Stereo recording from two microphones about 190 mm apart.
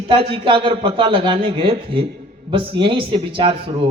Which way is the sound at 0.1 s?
30° right (ahead or behind).